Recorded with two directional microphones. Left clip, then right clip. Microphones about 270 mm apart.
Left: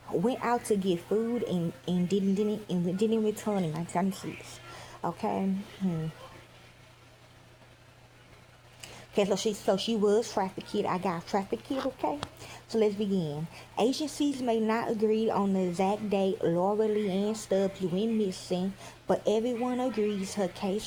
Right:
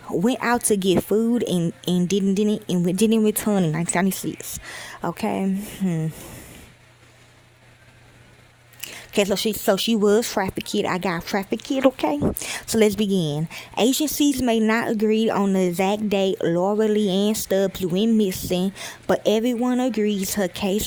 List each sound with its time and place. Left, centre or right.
0.1 s speech: right
8.8 s speech: right